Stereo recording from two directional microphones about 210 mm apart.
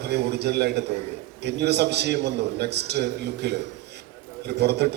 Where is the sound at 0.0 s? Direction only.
50° right (ahead or behind).